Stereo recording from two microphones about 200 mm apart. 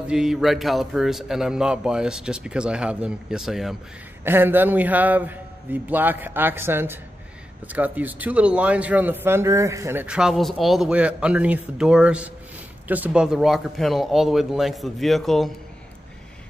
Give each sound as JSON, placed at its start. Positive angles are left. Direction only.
{"t": 0.1, "sound": "a man's voice", "side_deg": -5}